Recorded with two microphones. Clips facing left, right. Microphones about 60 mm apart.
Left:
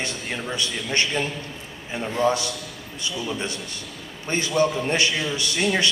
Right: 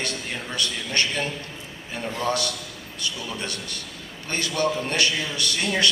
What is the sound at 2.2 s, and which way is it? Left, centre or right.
A man's voice, left.